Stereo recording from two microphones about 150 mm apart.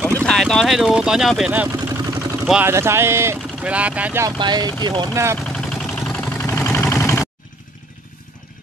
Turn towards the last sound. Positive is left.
turn(degrees=15)  # may be behind; listen again after turning